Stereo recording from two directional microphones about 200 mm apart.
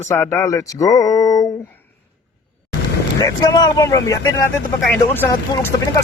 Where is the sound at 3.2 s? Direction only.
20° left (ahead or behind).